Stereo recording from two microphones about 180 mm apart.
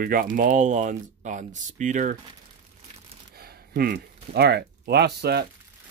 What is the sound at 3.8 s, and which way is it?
Speech, 65° right (ahead or behind).